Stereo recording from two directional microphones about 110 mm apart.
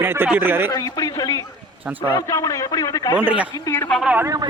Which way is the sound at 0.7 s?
35° left (ahead or behind).